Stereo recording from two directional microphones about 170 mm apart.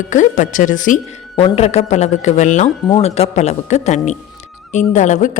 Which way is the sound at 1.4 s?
40° left (ahead or behind).